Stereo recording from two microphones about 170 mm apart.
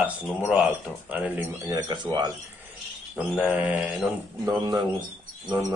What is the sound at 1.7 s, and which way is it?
Speech, 25° right (ahead or behind).